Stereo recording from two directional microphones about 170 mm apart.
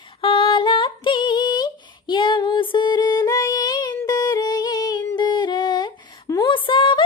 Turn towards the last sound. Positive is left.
turn(degrees=30)  # may be behind; listen again after turning